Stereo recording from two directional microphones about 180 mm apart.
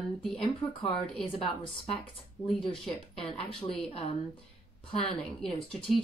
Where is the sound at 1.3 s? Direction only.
30° left (ahead or behind).